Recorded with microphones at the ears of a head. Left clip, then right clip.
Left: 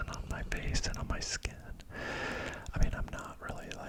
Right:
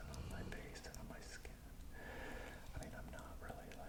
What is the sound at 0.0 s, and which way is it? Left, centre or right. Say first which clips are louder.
Whispering: left 12 dB; left.